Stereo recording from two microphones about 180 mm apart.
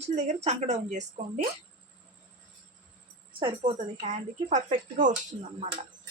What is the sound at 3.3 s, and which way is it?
A woman's voice, 30° right (ahead or behind).